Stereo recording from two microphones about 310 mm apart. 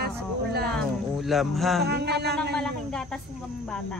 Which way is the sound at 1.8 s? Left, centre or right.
Right.